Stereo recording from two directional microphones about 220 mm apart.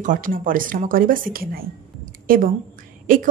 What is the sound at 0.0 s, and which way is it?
A woman's voice, 35° right (ahead or behind).